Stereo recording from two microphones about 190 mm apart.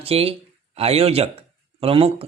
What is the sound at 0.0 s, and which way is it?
Speech, 30° right (ahead or behind).